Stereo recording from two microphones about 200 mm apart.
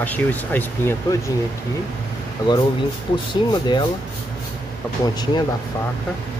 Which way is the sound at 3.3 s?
20° left (ahead or behind).